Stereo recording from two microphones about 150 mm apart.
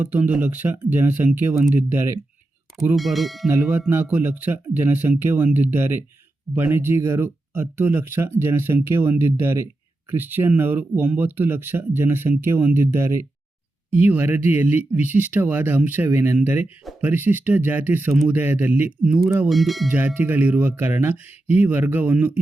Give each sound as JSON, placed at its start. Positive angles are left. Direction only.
{"t": 0.0, "sound": "speech", "side_deg": -10}
{"t": 2.9, "sound": "speech", "side_deg": 0}
{"t": 3.5, "sound": "speech", "side_deg": -15}
{"t": 19.5, "sound": "speech", "side_deg": 0}
{"t": 19.9, "sound": "speech", "side_deg": -15}